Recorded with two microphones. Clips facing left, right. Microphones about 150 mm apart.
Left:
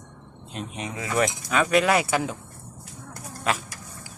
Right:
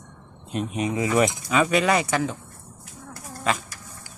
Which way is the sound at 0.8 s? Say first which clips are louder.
Right 4 dB; 15° right (ahead or behind).